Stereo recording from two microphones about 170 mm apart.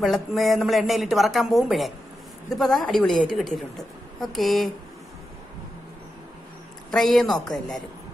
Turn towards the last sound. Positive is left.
turn(degrees=0)  # may be behind; listen again after turning